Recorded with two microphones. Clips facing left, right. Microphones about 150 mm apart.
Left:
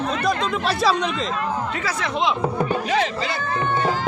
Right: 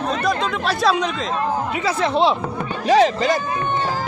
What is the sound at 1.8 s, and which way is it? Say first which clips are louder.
A woman's voice: right 8 dB; 30° right (ahead or behind).